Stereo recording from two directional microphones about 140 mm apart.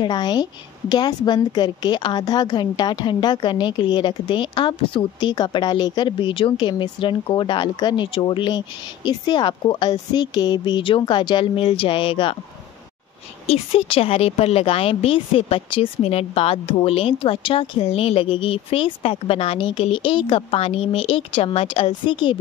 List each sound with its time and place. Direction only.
0.0 s a woman's voice: 30° left (ahead or behind)
13.5 s a woman's voice: 45° left (ahead or behind)